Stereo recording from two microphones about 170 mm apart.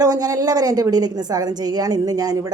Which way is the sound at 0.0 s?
20° right (ahead or behind).